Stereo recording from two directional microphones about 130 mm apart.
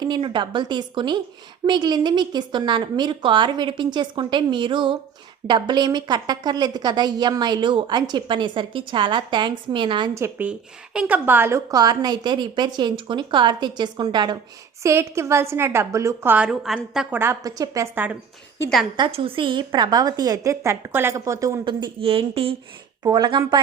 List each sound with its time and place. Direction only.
0.0 s speech: 35° right (ahead or behind)
10.2 s speech: 15° right (ahead or behind); by 14.3 s 35° right (ahead or behind)
14.8 s a woman's voice: 20° right (ahead or behind); by 17.1 s 5° right (ahead or behind)
17.1 s a woman's voice: 15° right (ahead or behind)
17.4 s a woman's voice: 25° right (ahead or behind)
17.9 s a woman's voice: 15° right (ahead or behind)
18.9 s a woman's voice: 40° right (ahead or behind); by 21.6 s 20° right (ahead or behind)
21.6 s speech: 35° right (ahead or behind)
23.0 s speech: 30° right (ahead or behind)